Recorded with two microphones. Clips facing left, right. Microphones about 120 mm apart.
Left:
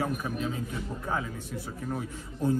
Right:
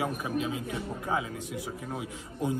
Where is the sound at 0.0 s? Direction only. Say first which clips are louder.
Even; 10° right (ahead or behind).